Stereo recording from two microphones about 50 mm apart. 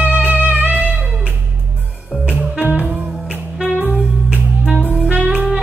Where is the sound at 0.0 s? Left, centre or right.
Right.